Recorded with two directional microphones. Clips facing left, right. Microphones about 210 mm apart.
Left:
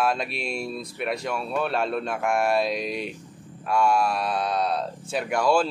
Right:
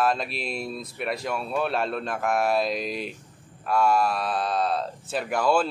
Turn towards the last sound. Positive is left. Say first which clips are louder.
# left 1 dB
turn(degrees=-5)  # may be behind; listen again after turning